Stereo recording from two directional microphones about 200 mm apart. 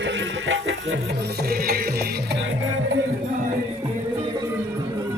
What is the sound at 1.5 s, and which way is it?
Music, 45° right (ahead or behind).